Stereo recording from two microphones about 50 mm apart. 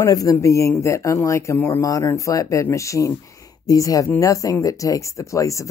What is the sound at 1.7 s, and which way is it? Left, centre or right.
Speech, left.